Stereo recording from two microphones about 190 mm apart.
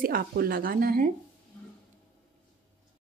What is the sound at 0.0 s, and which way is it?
A woman's voice, 50° right (ahead or behind).